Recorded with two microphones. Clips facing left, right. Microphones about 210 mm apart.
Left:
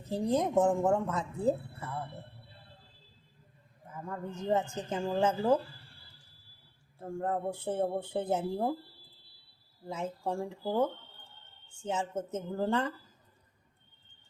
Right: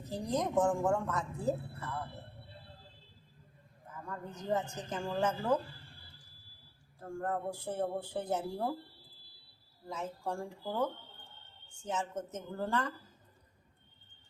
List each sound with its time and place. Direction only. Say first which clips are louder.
0.0 s speech: left 5 dB; 30° left (ahead or behind)
3.9 s speech: left 5 dB; 25° left (ahead or behind)
7.0 s speech: left 3 dB; 25° left (ahead or behind)
9.8 s speech: left 4 dB; 25° left (ahead or behind)
11.9 s speech: left 4 dB; 30° left (ahead or behind)